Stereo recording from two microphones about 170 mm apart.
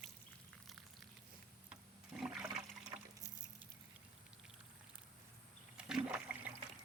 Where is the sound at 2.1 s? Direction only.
5° right (ahead or behind).